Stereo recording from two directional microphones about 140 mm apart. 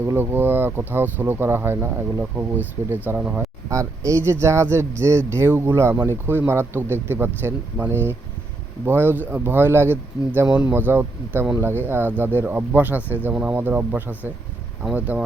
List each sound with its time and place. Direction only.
0.0 s speech: 15° right (ahead or behind)
3.7 s speech: 20° right (ahead or behind)